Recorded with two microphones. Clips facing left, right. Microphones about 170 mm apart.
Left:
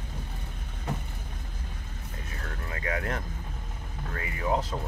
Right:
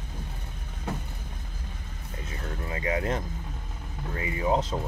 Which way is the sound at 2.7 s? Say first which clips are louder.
Right 4 dB; 20° right (ahead or behind).